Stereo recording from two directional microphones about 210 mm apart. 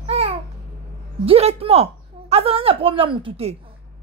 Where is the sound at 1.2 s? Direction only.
25° right (ahead or behind).